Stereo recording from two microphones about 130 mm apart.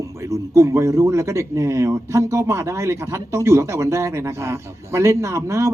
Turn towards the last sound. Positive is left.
turn(degrees=-20)  # may be behind; listen again after turning